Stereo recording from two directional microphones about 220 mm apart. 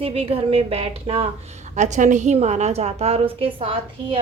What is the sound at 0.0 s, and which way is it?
A woman's voice, 25° right (ahead or behind).